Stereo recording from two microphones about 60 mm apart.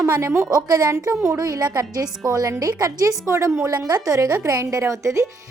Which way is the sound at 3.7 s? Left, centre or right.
Right.